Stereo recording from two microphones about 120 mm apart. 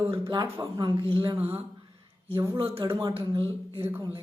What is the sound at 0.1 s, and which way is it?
Speech, 40° right (ahead or behind).